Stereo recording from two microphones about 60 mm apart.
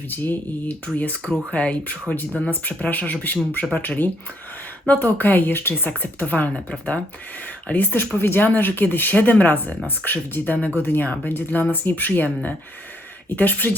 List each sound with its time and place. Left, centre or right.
0.1 s speech: left
1.5 s speech: left
7.9 s speech: left
13.3 s speech: left